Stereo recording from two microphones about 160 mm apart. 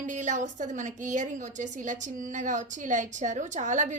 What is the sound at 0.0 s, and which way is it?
A woman's voice, 50° right (ahead or behind).